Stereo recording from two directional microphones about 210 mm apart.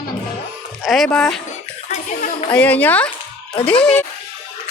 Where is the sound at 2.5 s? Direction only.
5° left (ahead or behind).